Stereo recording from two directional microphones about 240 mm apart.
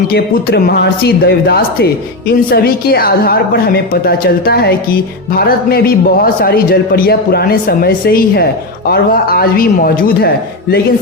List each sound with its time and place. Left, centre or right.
0.1 s a woman's voice: left